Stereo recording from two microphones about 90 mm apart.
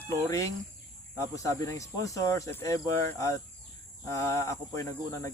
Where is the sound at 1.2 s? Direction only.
40° left (ahead or behind).